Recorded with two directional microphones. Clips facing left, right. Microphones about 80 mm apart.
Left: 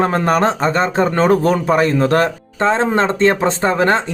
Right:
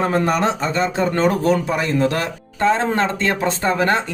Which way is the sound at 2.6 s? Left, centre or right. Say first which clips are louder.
Left 2 dB; left.